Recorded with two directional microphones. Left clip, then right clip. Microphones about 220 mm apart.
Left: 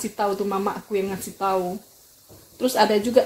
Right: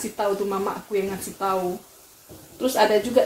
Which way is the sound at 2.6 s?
45° left (ahead or behind).